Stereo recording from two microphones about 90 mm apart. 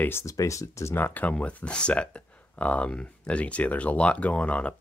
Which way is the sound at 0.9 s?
20° left (ahead or behind).